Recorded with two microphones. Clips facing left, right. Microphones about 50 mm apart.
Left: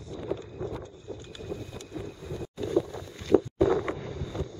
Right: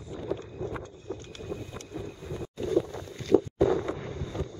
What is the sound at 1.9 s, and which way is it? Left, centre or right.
Boat, centre.